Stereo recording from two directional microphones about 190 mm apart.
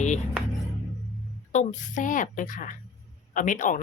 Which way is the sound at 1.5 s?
45° left (ahead or behind).